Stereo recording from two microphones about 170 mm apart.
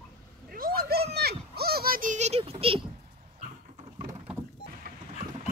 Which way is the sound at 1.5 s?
65° right (ahead or behind).